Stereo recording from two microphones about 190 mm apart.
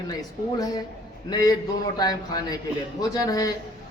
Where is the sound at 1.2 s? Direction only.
20° left (ahead or behind).